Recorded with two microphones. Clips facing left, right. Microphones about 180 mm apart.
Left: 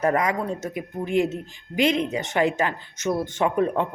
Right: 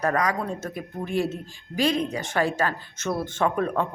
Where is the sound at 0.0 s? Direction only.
25° left (ahead or behind).